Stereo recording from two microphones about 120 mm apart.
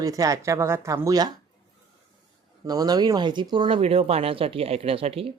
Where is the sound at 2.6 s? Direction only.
35° right (ahead or behind); by 5.3 s 50° right (ahead or behind).